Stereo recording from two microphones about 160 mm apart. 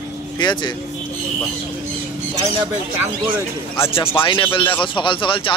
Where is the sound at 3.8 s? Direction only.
15° left (ahead or behind).